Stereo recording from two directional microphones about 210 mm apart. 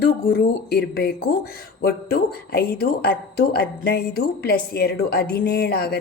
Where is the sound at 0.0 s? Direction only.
50° left (ahead or behind).